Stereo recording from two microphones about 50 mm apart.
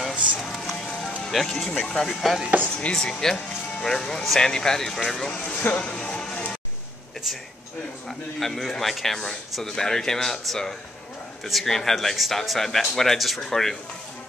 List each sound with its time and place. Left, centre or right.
0.1 s a sound: right
0.4 s printer: centre
0.8 s music: centre
1.3 s speech: centre
2.0 s a man's voice: centre
2.6 s speech: left
3.0 s speech: centre
5.3 s speech: left
5.9 s music: centre
8.1 s a man's voice: centre